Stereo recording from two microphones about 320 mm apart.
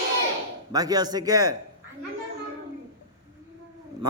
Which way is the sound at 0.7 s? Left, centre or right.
Centre.